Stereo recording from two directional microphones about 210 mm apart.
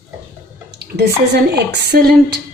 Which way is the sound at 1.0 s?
50° right (ahead or behind).